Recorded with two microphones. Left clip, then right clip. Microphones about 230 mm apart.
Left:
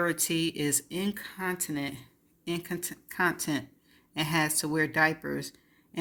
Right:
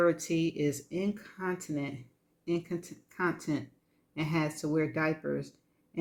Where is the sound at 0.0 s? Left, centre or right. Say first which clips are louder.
Right 1 dB; left.